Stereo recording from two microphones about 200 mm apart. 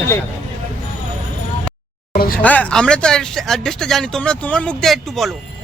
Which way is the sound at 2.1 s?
45° left (ahead or behind).